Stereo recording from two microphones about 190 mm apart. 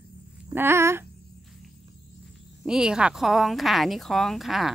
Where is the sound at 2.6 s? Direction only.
5° right (ahead or behind).